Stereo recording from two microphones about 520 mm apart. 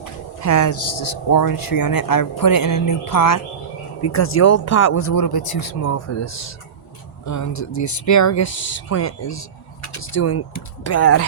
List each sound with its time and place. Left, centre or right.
0.4 s speech: left
5.1 s speech: left